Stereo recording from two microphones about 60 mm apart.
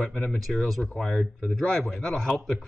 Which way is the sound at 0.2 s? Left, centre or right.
Centre.